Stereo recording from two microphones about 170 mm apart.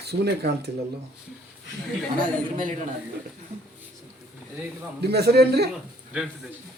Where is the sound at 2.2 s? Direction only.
50° right (ahead or behind).